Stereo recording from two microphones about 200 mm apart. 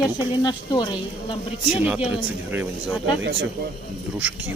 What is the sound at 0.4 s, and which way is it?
Speech, 20° left (ahead or behind).